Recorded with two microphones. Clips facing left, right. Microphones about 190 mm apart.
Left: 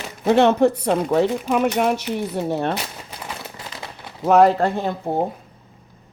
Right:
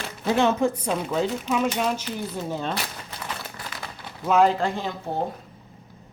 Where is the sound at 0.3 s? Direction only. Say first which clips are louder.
Left 6 dB; 65° left (ahead or behind).